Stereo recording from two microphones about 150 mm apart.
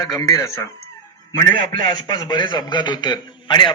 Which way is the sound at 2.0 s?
25° left (ahead or behind).